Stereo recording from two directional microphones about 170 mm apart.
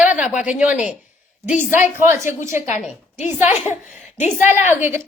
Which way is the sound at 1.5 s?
50° left (ahead or behind).